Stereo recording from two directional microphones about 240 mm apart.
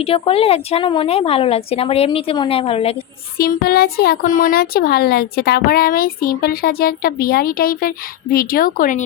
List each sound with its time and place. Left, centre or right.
0.0 s a woman's voice: left
3.3 s speech: left